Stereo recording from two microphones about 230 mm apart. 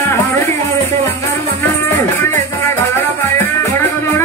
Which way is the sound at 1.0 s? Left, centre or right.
Centre.